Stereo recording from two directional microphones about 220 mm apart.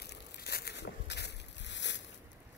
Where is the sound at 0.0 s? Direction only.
45° left (ahead or behind).